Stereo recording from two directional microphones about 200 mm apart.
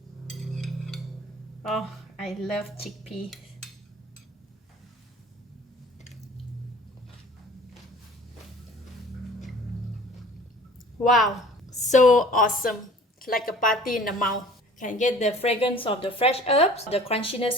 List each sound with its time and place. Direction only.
0.3 s music: centre (ahead or behind)
1.6 s speech: centre (ahead or behind)
11.1 s speech: centre (ahead or behind)
11.8 s a woman's voice: 35° left (ahead or behind)